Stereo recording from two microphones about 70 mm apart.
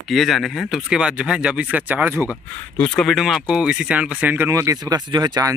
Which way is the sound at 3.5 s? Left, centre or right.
Centre.